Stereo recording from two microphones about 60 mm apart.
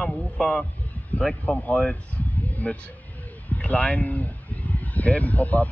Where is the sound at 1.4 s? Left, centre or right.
Left.